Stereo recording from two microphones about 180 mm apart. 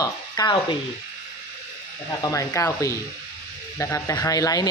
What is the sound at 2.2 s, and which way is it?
Speech, 20° left (ahead or behind).